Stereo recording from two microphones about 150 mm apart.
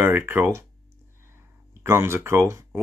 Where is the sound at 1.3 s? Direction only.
15° right (ahead or behind).